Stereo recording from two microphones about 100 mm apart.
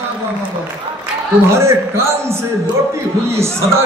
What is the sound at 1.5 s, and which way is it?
Speech, 25° right (ahead or behind).